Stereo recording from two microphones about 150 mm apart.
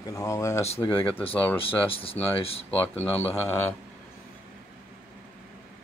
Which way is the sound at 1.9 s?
40° left (ahead or behind).